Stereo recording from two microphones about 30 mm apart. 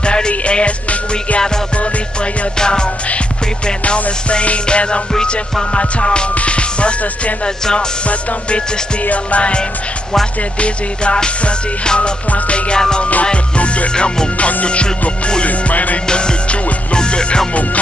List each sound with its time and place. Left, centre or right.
0.0 s music: left
3.8 s music: left
7.4 s music: left
8.1 s music: left
11.2 s music: left
13.9 s music: left
15.4 s music: left
16.1 s music: left